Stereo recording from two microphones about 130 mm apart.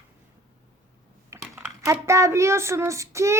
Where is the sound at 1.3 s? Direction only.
25° right (ahead or behind).